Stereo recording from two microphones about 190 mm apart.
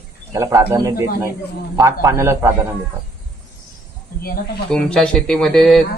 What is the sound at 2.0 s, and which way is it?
Speech, 15° right (ahead or behind).